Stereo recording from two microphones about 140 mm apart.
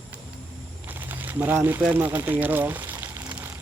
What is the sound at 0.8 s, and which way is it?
Speech, 15° right (ahead or behind).